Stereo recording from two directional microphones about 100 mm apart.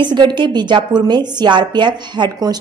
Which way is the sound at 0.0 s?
50° right (ahead or behind).